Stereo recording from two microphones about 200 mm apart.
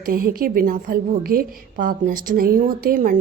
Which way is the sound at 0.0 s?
45° right (ahead or behind).